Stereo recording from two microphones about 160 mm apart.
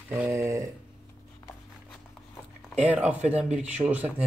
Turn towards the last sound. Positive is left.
turn(degrees=-10)  # may be behind; listen again after turning